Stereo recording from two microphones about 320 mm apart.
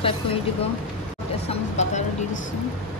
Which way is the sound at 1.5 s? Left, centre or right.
Left.